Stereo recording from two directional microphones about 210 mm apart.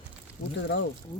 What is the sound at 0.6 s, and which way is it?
Speech, 60° left (ahead or behind).